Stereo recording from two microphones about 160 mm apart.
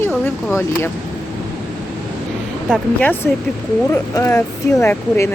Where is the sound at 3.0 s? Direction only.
10° left (ahead or behind).